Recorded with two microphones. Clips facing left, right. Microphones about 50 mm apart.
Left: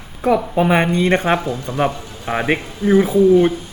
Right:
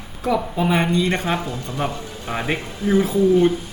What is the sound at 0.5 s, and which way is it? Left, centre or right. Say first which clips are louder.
Speech: left 4 dB; left.